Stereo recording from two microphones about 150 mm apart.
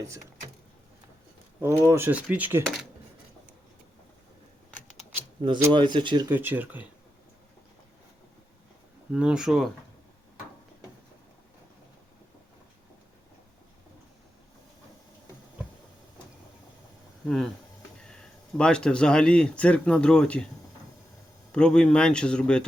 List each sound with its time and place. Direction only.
1.6 s speech: 15° right (ahead or behind)
5.7 s speech: 30° right (ahead or behind)
6.3 s speech: 10° right (ahead or behind)
9.1 s speech: 5° right (ahead or behind)
17.2 s speech: centre (ahead or behind)
21.5 s speech: 5° left (ahead or behind)